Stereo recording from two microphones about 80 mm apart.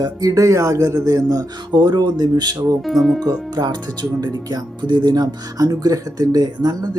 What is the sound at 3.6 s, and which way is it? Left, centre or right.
Speech, right.